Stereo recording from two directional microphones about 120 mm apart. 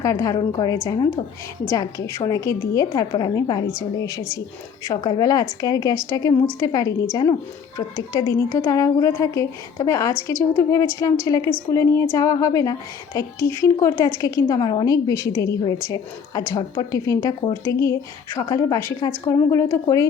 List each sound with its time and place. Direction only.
0.0 s a woman's voice: 30° left (ahead or behind)
1.7 s a woman's voice: 25° left (ahead or behind)
3.1 s a woman's voice: 40° left (ahead or behind)
4.0 s a woman's voice: 30° left (ahead or behind)
4.9 s a woman's voice: 40° left (ahead or behind)